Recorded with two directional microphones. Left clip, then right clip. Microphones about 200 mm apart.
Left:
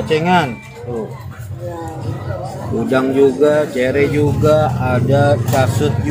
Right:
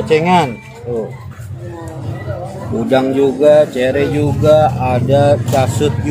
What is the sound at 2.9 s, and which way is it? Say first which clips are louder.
Speech: even; 15° right (ahead or behind).